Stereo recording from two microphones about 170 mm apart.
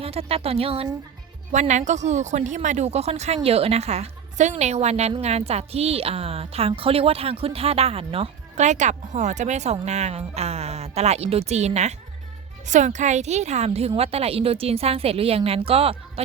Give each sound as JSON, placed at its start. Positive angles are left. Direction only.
{"t": 0.0, "sound": "speech", "side_deg": -35}